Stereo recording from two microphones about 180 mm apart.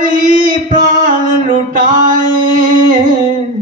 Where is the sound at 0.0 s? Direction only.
45° right (ahead or behind).